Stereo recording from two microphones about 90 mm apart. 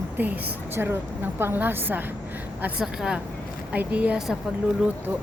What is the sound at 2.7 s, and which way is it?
A woman's voice, 10° right (ahead or behind).